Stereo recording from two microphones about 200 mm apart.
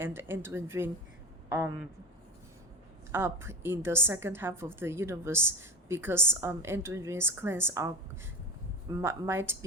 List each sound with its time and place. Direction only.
0.0 s a woman's voice: 10° right (ahead or behind)
3.1 s a woman's voice: 10° right (ahead or behind)